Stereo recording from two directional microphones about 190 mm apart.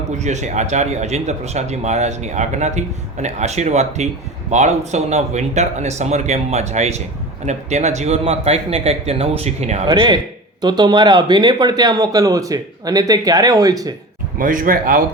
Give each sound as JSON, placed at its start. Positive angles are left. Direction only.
{"t": 0.2, "sound": "speech", "side_deg": -35}
{"t": 9.8, "sound": "speech", "side_deg": -25}
{"t": 14.3, "sound": "speech", "side_deg": -45}